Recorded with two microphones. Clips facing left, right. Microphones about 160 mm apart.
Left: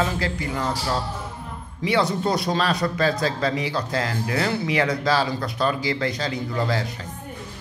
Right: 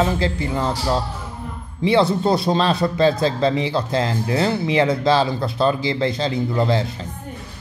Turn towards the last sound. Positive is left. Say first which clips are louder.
# right 5 dB
turn(degrees=-25)  # may be behind; listen again after turning